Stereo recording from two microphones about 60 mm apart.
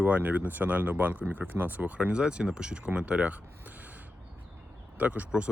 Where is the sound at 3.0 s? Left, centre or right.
Right.